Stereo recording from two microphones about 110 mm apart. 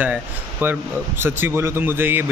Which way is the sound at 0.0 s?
15° right (ahead or behind).